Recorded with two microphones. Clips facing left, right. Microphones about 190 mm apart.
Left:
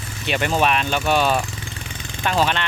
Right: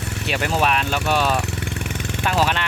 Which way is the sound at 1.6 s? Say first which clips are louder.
Right 7 dB; 70° right (ahead or behind).